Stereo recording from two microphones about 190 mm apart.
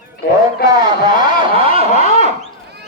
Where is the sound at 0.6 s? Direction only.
20° right (ahead or behind).